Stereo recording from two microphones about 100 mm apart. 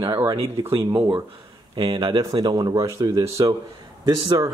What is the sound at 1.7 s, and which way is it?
Speech, 60° right (ahead or behind).